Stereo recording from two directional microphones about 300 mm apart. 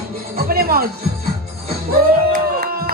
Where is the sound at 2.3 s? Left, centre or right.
Right.